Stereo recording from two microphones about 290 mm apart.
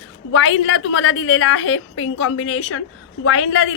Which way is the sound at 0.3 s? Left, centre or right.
Left.